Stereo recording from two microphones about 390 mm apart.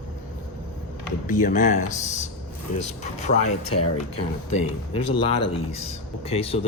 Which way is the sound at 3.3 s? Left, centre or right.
Left.